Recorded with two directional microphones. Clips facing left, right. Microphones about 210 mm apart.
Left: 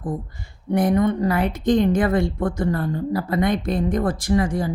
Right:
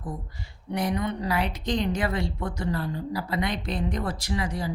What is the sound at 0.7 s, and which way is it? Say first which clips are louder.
Speech: left 9 dB; 50° left (ahead or behind).